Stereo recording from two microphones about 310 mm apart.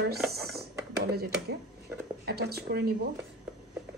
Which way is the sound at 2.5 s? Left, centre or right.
Right.